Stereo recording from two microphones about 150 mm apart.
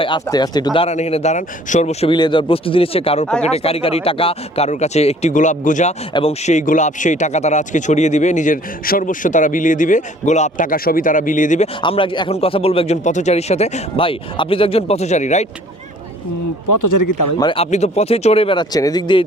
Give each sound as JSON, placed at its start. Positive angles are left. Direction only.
{"t": 0.0, "sound": "speech", "side_deg": 30}
{"t": 0.9, "sound": "speech", "side_deg": 45}
{"t": 2.0, "sound": "speech", "side_deg": 30}
{"t": 6.1, "sound": "a man's voice", "side_deg": 45}
{"t": 11.8, "sound": "speech", "side_deg": 35}
{"t": 17.4, "sound": "speech", "side_deg": 35}